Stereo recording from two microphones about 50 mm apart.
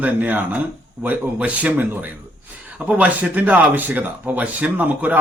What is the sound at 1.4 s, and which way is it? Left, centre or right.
Speech, right.